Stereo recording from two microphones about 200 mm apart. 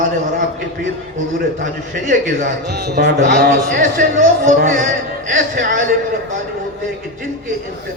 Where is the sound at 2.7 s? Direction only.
55° right (ahead or behind).